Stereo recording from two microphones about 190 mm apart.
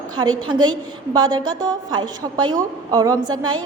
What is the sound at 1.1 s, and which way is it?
A woman's voice, 20° right (ahead or behind).